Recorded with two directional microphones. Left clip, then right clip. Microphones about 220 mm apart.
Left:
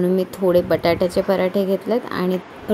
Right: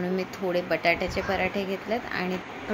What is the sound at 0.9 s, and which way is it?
Speech, 35° left (ahead or behind).